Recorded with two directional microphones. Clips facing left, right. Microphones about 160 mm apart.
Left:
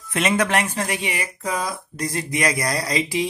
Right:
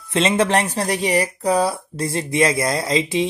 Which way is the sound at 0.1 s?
25° right (ahead or behind).